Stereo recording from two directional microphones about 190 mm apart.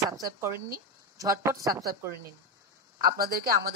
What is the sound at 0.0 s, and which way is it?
Speech, 15° right (ahead or behind).